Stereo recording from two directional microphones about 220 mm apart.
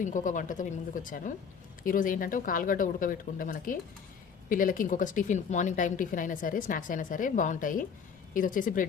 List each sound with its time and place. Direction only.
0.0 s a woman's voice: 35° left (ahead or behind)
1.8 s a woman's voice: 40° left (ahead or behind)